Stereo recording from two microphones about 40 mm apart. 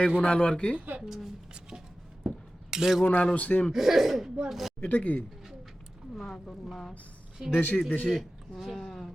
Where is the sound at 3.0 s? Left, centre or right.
Left.